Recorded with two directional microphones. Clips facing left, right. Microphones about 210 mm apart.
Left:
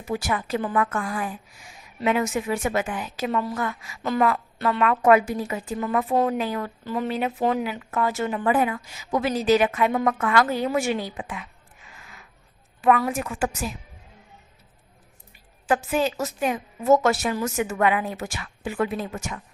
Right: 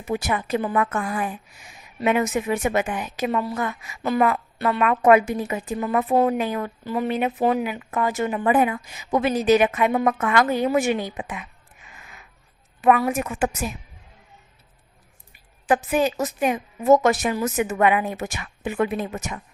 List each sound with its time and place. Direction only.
0.1 s a woman's voice: 20° right (ahead or behind)
11.9 s a sound: 20° right (ahead or behind)
12.8 s a woman's voice: 15° right (ahead or behind)
15.6 s speech: 15° right (ahead or behind)